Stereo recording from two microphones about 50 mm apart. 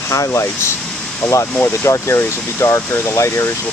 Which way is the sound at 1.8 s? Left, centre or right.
Left.